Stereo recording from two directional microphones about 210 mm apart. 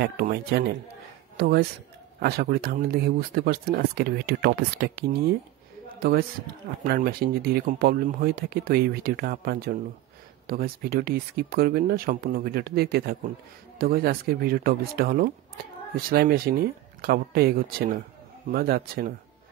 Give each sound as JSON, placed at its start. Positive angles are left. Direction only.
{"t": 0.0, "sound": "a man's voice", "side_deg": -50}